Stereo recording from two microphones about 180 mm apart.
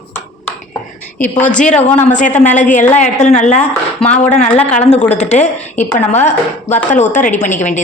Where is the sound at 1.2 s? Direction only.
10° left (ahead or behind).